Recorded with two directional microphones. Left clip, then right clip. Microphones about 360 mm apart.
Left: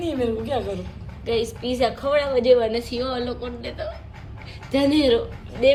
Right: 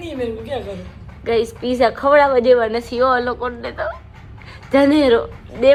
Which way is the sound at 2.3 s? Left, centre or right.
Centre.